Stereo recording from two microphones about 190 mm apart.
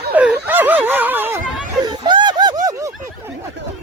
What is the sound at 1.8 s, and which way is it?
Snicker, 25° right (ahead or behind).